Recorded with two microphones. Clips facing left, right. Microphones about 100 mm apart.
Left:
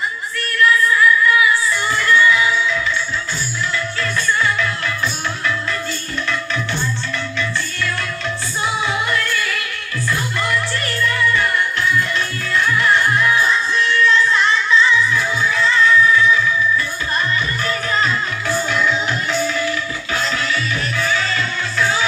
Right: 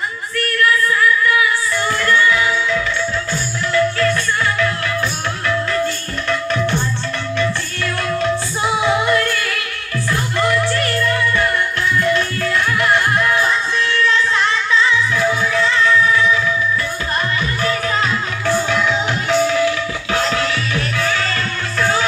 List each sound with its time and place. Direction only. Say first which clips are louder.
0.6 s a sound: left 2 dB; 50° right (ahead or behind)
2.0 s music: left 2 dB; 50° right (ahead or behind)
9.0 s music: right 4 dB; 60° right (ahead or behind)
17.6 s music: right 2 dB; 75° right (ahead or behind); by 22.0 s 55° right (ahead or behind)